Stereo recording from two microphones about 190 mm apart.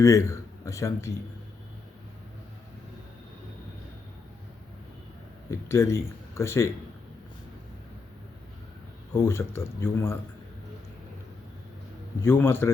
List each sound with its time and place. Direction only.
0.0 s a man's voice: 15° left (ahead or behind)
5.5 s speech: 15° left (ahead or behind)
9.1 s speech: 15° left (ahead or behind)
12.2 s speech: 10° left (ahead or behind)